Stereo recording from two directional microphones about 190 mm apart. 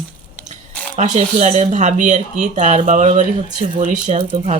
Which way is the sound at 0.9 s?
40° right (ahead or behind).